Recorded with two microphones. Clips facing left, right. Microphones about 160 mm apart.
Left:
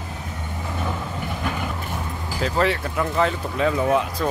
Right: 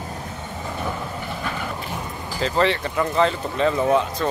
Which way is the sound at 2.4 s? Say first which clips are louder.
Right 1 dB; 5° left (ahead or behind).